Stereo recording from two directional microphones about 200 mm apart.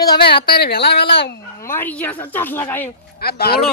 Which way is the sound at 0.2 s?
55° left (ahead or behind).